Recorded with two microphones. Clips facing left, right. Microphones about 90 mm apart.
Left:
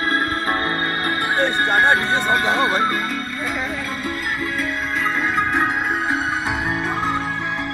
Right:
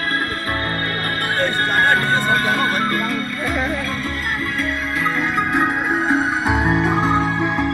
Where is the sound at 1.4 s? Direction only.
15° left (ahead or behind).